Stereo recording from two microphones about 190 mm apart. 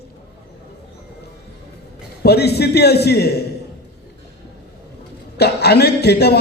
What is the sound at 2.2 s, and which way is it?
A man's voice, 60° left (ahead or behind).